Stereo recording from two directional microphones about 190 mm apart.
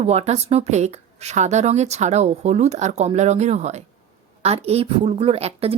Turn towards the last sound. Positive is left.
turn(degrees=-30)  # may be behind; listen again after turning